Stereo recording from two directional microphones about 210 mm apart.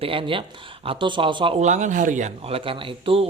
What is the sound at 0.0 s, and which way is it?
Speech, 25° right (ahead or behind).